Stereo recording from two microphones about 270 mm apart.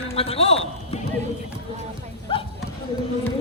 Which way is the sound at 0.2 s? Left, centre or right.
Left.